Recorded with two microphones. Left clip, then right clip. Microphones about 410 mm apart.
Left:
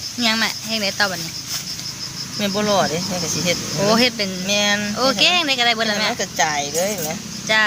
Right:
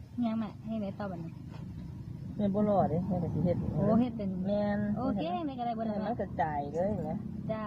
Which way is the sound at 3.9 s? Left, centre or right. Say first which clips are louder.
Left 14 dB; right.